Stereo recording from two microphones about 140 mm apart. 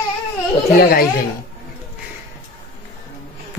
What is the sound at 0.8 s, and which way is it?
Speech, 90° left.